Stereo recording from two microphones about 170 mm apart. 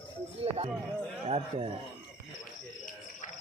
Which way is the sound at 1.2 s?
35° right (ahead or behind).